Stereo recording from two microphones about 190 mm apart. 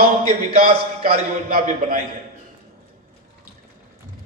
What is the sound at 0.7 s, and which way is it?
Speech, 30° right (ahead or behind).